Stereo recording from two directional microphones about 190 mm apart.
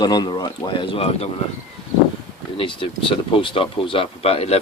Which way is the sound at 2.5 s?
25° left (ahead or behind).